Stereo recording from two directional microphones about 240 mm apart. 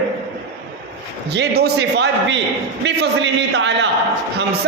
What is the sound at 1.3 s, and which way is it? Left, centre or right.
A man's voice, right.